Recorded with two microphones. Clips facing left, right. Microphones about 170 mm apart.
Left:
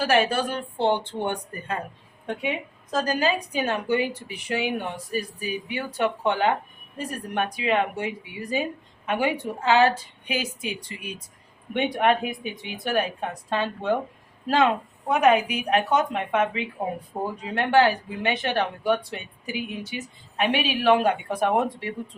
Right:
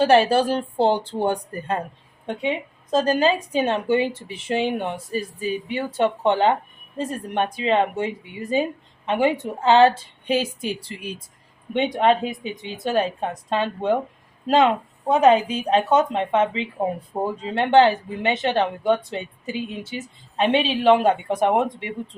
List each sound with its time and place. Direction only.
0.0 s speech: 30° right (ahead or behind)
2.2 s a woman's voice: 25° right (ahead or behind)
11.7 s a woman's voice: 20° right (ahead or behind)